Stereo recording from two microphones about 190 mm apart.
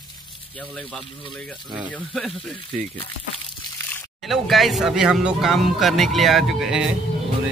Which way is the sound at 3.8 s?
Centre (ahead or behind).